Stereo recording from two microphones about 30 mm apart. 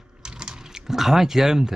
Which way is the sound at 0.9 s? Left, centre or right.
Centre.